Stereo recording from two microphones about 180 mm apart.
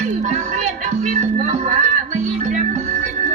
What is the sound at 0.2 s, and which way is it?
Music, 45° right (ahead or behind).